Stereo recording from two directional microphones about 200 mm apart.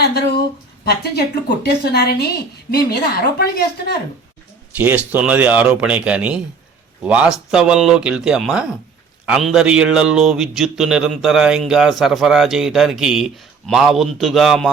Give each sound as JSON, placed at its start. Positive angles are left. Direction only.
{"t": 0.9, "sound": "a woman's voice", "side_deg": 55}
{"t": 4.8, "sound": "speech", "side_deg": -10}